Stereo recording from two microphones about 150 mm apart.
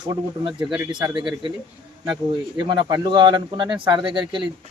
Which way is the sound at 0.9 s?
30° right (ahead or behind).